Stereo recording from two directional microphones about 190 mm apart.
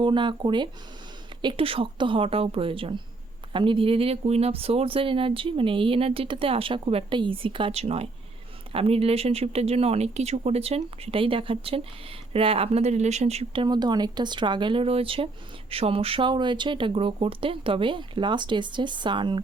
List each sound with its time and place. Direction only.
0.0 s speech: 25° right (ahead or behind)